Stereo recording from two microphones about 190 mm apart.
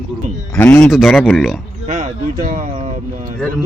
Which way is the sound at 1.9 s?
40° right (ahead or behind).